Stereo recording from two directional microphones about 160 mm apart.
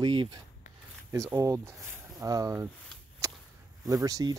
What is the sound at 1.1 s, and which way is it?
Speech, 15° right (ahead or behind).